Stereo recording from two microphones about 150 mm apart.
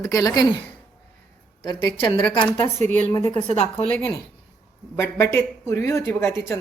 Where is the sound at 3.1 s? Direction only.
25° left (ahead or behind).